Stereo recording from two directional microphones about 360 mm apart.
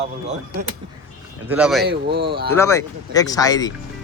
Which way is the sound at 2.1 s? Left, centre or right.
Right.